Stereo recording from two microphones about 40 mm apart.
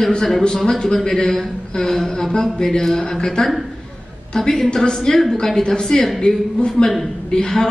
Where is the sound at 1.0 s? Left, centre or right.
Centre.